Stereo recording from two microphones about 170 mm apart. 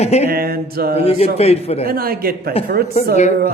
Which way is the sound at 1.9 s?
60° right (ahead or behind).